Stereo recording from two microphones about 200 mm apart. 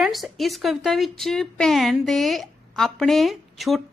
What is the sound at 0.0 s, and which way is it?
A woman's voice, centre (ahead or behind).